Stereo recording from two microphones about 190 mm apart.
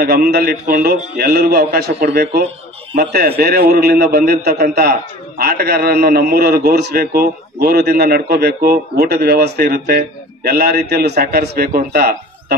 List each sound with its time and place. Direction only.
0.0 s a man's voice: 55° right (ahead or behind)